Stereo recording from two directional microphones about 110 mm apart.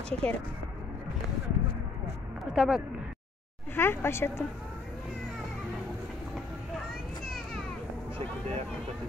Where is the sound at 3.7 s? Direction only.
20° left (ahead or behind).